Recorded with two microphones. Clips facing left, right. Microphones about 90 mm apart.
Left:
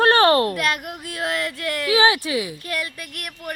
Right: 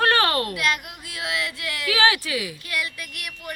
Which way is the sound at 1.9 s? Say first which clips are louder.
Left 3 dB; 25° left (ahead or behind).